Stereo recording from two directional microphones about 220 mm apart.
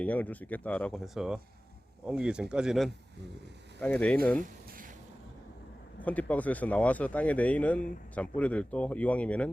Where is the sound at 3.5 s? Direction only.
50° right (ahead or behind).